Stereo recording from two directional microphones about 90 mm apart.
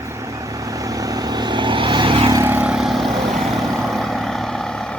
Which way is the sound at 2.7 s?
5° right (ahead or behind).